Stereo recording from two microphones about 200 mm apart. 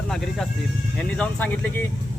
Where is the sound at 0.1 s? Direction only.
Centre (ahead or behind).